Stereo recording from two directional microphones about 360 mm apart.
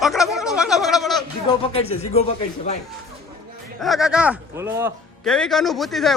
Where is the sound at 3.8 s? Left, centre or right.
Centre.